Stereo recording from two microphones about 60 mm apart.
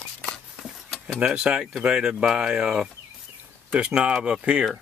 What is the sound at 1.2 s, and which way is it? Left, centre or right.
Speech, centre.